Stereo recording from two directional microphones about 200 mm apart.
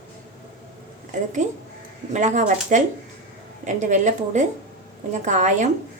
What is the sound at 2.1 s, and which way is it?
A woman's voice, 35° right (ahead or behind).